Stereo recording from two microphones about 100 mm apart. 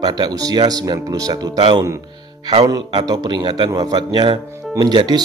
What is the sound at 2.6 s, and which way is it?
Speech, 40° right (ahead or behind).